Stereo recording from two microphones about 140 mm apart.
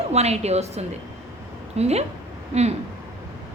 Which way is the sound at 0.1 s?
50° right (ahead or behind).